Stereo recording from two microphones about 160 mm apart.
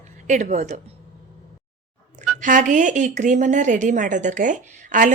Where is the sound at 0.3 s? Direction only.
50° right (ahead or behind).